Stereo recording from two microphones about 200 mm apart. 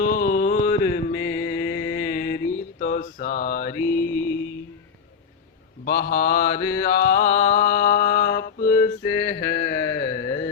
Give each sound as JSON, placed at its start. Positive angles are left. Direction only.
{"t": 0.0, "sound": "mantra", "side_deg": 45}
{"t": 3.8, "sound": "mantra", "side_deg": 10}
{"t": 5.8, "sound": "mantra", "side_deg": 45}
{"t": 9.4, "sound": "a sound", "side_deg": 45}
{"t": 10.2, "sound": "carnatic music", "side_deg": 15}